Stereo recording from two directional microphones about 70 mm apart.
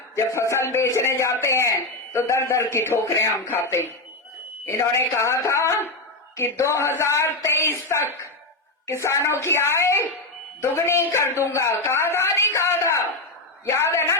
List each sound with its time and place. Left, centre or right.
0.3 s a woman's voice: left
13.7 s a woman's voice: left